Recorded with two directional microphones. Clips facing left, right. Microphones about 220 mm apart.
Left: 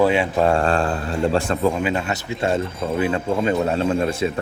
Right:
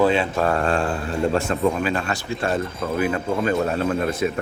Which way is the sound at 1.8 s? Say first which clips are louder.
Left 1 dB; 20° left (ahead or behind).